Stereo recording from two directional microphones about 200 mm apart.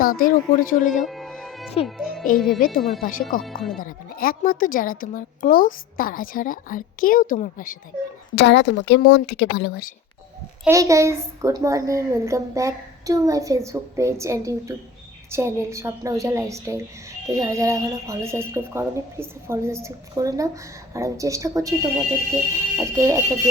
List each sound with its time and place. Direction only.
0.0 s a woman's voice: 45° left (ahead or behind)
1.0 s music: centre (ahead or behind)
2.0 s a child's voice: centre (ahead or behind)
2.6 s a woman's voice: 40° left (ahead or behind)
3.4 s speech: centre (ahead or behind)
3.8 s a woman's voice: 45° left (ahead or behind)
8.4 s a woman's voice: 60° left (ahead or behind)
10.7 s a child's voice: 15° right (ahead or behind)